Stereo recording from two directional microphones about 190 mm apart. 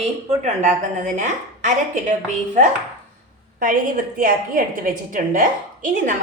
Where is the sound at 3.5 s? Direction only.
45° right (ahead or behind).